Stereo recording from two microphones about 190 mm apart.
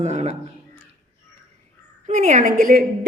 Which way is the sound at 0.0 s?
35° right (ahead or behind).